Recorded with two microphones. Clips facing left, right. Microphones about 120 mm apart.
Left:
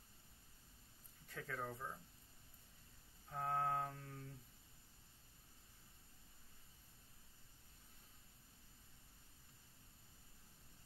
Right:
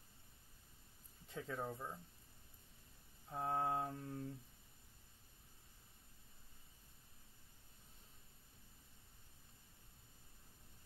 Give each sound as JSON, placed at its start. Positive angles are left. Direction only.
{"t": 1.2, "sound": "speech", "side_deg": -20}
{"t": 3.3, "sound": "mantra", "side_deg": -20}